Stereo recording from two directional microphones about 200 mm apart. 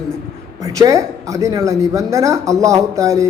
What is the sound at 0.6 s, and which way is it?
Speech, 15° right (ahead or behind).